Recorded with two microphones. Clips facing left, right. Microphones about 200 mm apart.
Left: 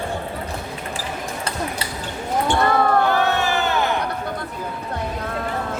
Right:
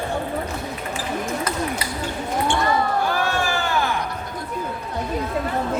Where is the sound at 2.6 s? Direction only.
60° left (ahead or behind).